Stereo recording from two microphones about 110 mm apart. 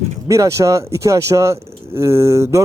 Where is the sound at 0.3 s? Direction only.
30° right (ahead or behind).